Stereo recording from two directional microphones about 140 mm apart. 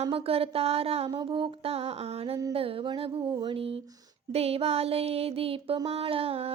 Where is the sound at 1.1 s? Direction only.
35° right (ahead or behind).